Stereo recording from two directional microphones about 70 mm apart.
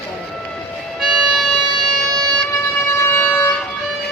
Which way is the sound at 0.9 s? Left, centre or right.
Centre.